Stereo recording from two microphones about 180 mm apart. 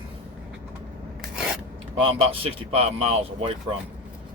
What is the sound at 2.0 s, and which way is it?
Speech, 30° right (ahead or behind).